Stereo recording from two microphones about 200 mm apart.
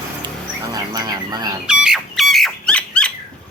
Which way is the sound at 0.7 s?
20° right (ahead or behind).